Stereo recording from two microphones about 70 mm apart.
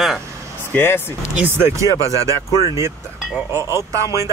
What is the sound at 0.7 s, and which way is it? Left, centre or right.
Speech, left.